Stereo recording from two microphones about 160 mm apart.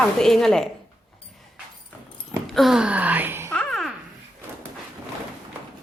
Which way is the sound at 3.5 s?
Centre (ahead or behind).